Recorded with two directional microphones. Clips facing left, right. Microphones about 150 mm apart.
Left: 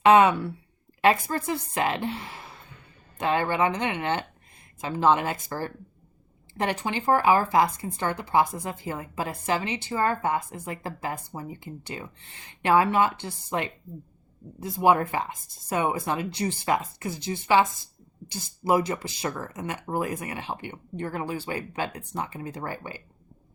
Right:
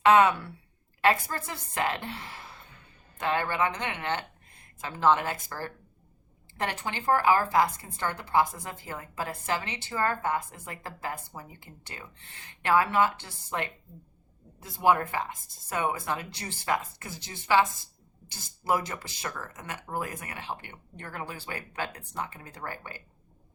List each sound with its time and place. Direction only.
0.0 s speech: 20° left (ahead or behind)